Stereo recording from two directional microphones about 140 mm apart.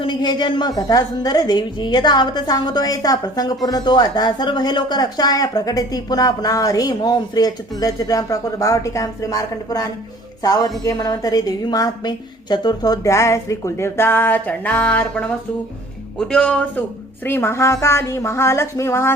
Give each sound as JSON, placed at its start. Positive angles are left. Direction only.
{"t": 0.0, "sound": "a woman's voice", "side_deg": 35}
{"t": 17.2, "sound": "a woman's voice", "side_deg": 15}